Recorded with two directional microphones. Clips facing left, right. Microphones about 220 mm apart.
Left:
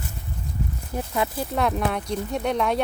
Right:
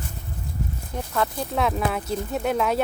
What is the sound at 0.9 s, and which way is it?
Speech, 5° left (ahead or behind).